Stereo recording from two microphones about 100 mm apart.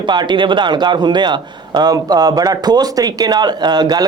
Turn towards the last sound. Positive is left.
turn(degrees=-45)  # may be behind; listen again after turning